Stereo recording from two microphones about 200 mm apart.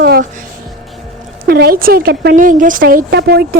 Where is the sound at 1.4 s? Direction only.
50° right (ahead or behind).